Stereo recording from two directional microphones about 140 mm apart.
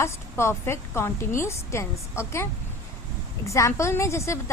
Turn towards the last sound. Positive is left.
turn(degrees=20)  # may be behind; listen again after turning